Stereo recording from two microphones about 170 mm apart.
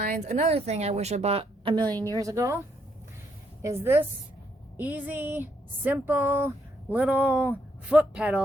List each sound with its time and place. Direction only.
0.0 s speech: 55° right (ahead or behind); by 1.8 s 30° right (ahead or behind)
1.8 s a woman's voice: 10° left (ahead or behind)
2.2 s speech: 20° right (ahead or behind)
3.6 s speech: 15° right (ahead or behind)